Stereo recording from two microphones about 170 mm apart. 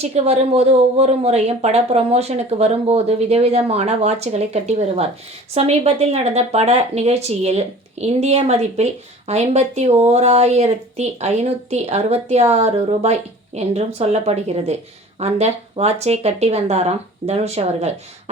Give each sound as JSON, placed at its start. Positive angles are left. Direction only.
{"t": 0.0, "sound": "speech", "side_deg": -40}